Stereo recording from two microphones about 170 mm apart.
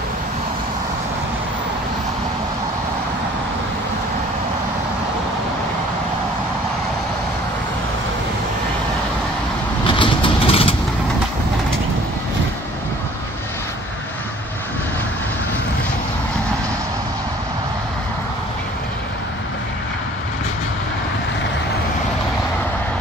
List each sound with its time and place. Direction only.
9.9 s vehicle: 30° left (ahead or behind)